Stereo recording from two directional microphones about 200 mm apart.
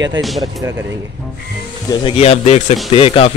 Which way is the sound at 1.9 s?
30° left (ahead or behind).